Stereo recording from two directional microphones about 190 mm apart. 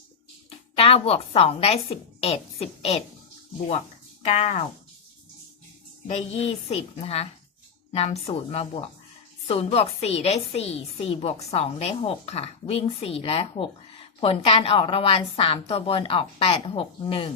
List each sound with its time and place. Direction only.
0.8 s a woman's voice: 30° left (ahead or behind)
4.2 s speech: 35° left (ahead or behind)
6.1 s a woman's voice: 35° left (ahead or behind)